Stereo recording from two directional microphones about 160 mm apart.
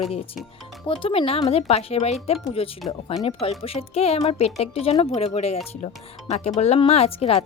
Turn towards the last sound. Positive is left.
turn(degrees=35)  # may be behind; listen again after turning